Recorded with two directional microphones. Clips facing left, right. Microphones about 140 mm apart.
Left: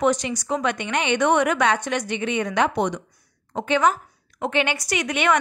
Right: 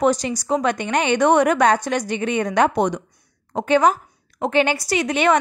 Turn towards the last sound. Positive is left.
turn(degrees=-35)  # may be behind; listen again after turning